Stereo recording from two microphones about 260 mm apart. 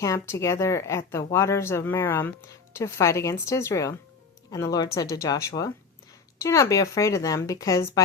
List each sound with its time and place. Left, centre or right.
0.0 s speech: centre